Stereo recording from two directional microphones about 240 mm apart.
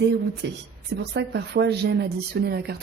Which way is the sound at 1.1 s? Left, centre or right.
Right.